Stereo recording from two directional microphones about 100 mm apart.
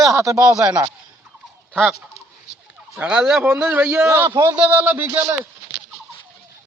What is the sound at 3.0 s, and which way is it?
Speech, 10° right (ahead or behind).